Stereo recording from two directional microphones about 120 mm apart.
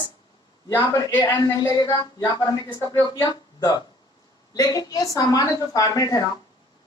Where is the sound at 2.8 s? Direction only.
30° left (ahead or behind).